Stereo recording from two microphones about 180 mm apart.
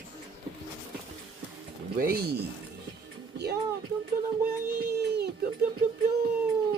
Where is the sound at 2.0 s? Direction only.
55° right (ahead or behind).